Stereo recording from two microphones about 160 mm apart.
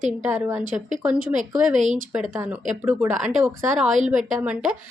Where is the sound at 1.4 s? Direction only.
50° right (ahead or behind).